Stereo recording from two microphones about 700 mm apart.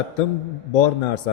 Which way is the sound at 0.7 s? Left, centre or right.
Left.